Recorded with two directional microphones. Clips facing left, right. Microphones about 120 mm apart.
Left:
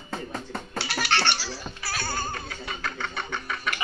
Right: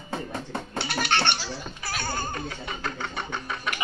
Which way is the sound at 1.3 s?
20° right (ahead or behind).